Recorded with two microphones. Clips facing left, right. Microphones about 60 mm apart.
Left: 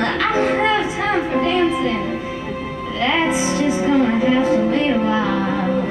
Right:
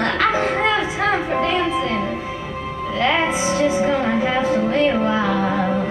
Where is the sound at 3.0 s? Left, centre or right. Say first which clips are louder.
Left 1 dB; right.